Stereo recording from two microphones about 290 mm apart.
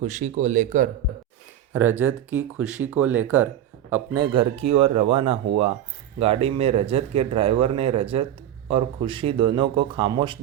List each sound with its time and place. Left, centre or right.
0.0 s speech: right
1.7 s speech: centre
4.3 s speech: centre